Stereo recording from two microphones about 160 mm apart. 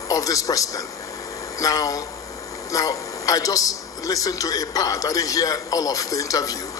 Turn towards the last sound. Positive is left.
turn(degrees=20)  # may be behind; listen again after turning